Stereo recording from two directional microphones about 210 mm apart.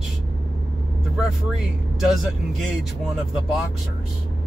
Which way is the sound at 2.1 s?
Centre (ahead or behind).